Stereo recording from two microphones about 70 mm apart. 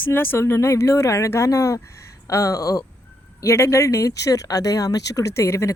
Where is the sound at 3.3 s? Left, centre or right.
Left.